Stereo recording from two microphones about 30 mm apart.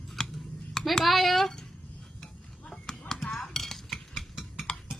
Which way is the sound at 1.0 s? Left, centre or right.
Centre.